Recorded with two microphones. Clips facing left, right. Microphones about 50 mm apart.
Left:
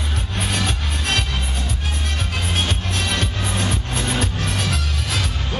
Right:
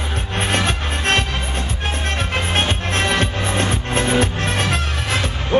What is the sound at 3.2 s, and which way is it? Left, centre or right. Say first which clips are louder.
Music: right 4 dB; right.